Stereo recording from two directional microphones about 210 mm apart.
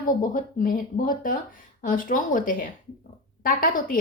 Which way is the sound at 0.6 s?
40° left (ahead or behind).